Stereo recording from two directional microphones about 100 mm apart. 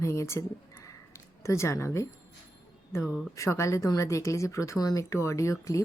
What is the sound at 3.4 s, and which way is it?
A woman's voice, 30° left (ahead or behind).